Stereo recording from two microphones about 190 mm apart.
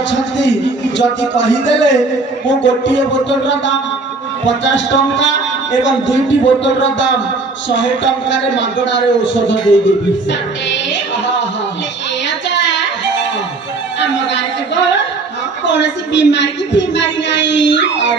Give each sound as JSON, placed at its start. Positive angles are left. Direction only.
{"t": 0.1, "sound": "a man's voice", "side_deg": 70}
{"t": 12.5, "sound": "music", "side_deg": 70}
{"t": 14.0, "sound": "a sound", "side_deg": 70}
{"t": 15.6, "sound": "a woman's voice", "side_deg": 70}